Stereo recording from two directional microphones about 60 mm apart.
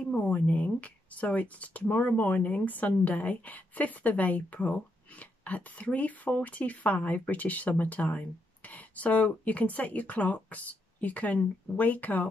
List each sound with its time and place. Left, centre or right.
0.1 s speech: left